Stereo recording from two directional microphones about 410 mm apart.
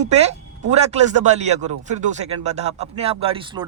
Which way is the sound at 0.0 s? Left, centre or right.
Centre.